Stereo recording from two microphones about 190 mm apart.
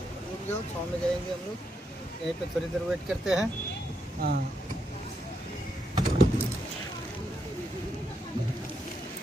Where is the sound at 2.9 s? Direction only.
5° right (ahead or behind).